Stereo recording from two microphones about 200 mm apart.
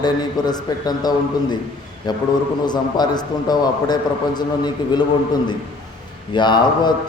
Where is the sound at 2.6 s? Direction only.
20° left (ahead or behind).